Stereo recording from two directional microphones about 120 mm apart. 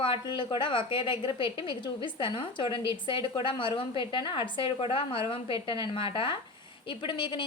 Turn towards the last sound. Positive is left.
turn(degrees=40)  # may be behind; listen again after turning